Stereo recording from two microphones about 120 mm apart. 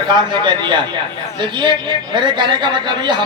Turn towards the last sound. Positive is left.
turn(degrees=-40)  # may be behind; listen again after turning